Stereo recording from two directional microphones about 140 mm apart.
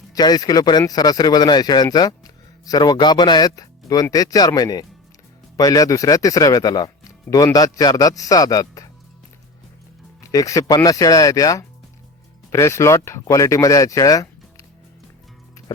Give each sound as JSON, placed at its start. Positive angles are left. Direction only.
{"t": 0.1, "sound": "speech", "side_deg": 30}
{"t": 10.3, "sound": "speech", "side_deg": 25}